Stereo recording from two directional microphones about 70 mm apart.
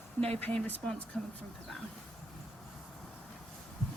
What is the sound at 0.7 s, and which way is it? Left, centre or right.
Speech, left.